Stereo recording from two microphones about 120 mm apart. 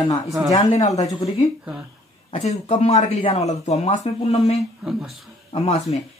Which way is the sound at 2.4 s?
65° left (ahead or behind).